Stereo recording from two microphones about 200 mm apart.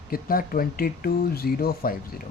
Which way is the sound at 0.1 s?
45° left (ahead or behind).